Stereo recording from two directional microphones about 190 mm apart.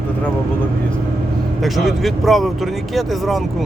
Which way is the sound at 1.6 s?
Centre (ahead or behind).